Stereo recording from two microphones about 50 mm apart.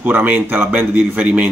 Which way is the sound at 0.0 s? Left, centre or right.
Right.